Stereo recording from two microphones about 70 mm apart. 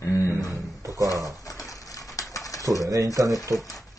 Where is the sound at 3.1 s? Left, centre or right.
Right.